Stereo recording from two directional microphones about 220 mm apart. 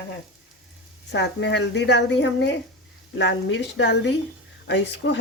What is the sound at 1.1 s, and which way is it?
Speech, 50° left (ahead or behind).